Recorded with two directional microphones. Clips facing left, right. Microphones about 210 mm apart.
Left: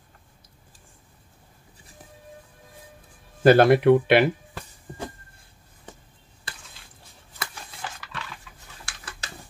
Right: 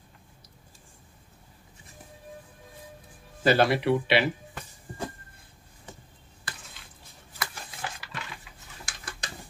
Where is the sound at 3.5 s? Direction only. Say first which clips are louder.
Left 7 dB; 50° left (ahead or behind).